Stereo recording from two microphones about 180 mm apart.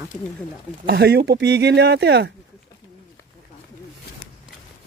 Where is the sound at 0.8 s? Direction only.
60° right (ahead or behind).